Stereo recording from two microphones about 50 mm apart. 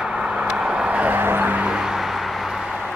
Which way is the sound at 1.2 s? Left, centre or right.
Right.